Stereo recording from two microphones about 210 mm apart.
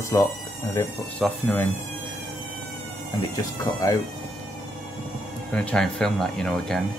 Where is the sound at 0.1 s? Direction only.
15° left (ahead or behind).